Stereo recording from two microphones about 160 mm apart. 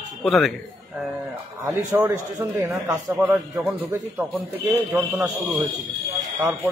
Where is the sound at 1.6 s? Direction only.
15° right (ahead or behind).